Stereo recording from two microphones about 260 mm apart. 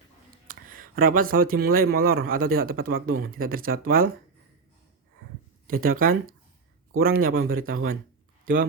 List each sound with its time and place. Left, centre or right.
0.4 s speech: right
5.6 s speech: right